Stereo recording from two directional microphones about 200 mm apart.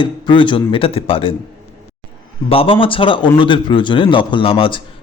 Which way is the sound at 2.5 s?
25° left (ahead or behind).